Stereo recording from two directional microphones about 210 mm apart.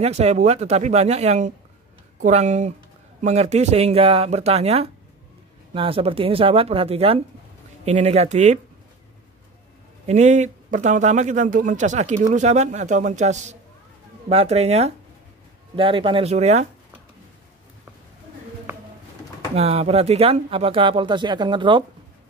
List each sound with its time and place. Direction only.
0.0 s a man's voice: 30° right (ahead or behind)
10.0 s a man's voice: 35° right (ahead or behind)
19.5 s speech: 30° right (ahead or behind)